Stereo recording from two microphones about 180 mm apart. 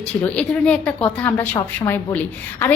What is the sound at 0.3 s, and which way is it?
A woman's voice, 5° left (ahead or behind).